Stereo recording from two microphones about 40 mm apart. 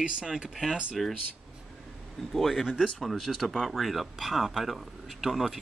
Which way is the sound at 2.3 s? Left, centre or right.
Centre.